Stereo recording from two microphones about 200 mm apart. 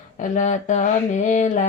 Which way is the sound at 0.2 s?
40° left (ahead or behind).